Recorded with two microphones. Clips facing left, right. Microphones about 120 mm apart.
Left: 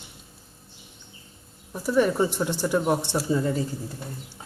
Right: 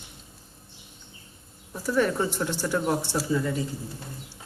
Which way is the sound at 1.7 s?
15° left (ahead or behind).